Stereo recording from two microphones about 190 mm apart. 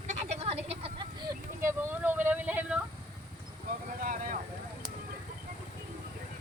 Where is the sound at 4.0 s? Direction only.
45° right (ahead or behind).